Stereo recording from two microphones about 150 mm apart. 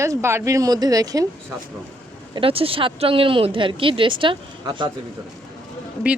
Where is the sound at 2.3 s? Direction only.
40° right (ahead or behind).